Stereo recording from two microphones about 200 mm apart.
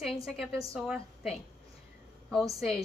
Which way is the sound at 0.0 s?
Centre (ahead or behind).